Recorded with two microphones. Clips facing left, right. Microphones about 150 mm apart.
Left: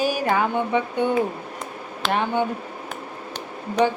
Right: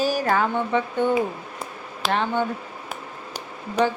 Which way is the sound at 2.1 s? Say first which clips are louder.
Left 1 dB; 10° left (ahead or behind).